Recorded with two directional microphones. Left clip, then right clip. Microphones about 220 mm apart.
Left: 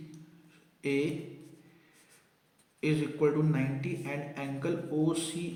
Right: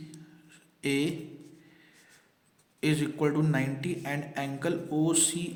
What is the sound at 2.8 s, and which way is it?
A man's voice, 45° right (ahead or behind).